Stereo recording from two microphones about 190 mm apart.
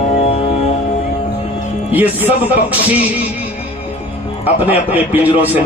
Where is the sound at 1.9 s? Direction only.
10° right (ahead or behind).